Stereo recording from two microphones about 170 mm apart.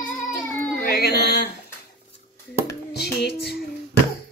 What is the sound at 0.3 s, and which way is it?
Cat, 10° left (ahead or behind).